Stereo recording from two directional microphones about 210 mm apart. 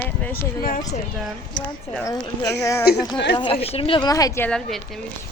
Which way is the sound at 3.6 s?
25° left (ahead or behind).